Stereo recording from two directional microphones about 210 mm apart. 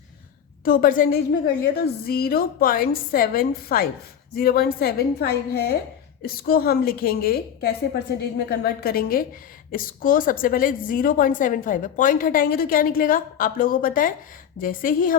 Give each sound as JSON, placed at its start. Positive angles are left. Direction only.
{"t": 0.6, "sound": "a woman's voice", "side_deg": 45}